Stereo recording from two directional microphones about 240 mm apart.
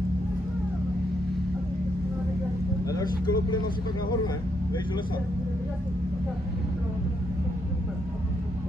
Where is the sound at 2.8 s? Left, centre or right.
Centre.